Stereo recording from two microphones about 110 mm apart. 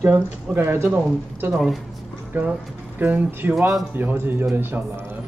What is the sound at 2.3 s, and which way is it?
Speech, 15° right (ahead or behind).